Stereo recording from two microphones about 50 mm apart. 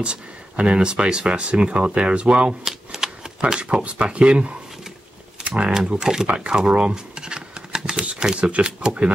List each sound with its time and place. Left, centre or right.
0.0 s speech: centre
2.6 s speech: centre
5.4 s a sound: centre
5.9 s speech: centre